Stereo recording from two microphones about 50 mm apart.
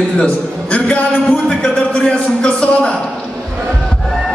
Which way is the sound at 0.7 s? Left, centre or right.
Left.